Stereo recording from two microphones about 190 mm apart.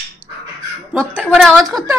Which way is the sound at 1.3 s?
Centre (ahead or behind).